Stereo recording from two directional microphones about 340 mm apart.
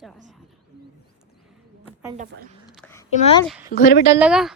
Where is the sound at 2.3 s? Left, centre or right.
Right.